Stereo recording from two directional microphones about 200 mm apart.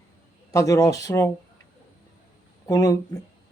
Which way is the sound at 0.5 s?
15° left (ahead or behind).